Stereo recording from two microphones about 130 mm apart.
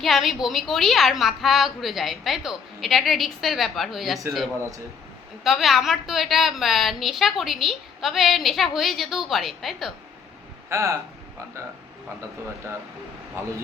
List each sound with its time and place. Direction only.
0.0 s a woman's voice: centre (ahead or behind)
5.4 s a woman's voice: centre (ahead or behind)
10.7 s speech: 20° right (ahead or behind)
13.4 s a man's voice: 20° right (ahead or behind)